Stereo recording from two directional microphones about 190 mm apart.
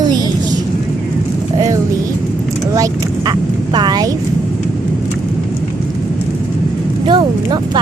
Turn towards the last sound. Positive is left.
turn(degrees=-25)  # may be behind; listen again after turning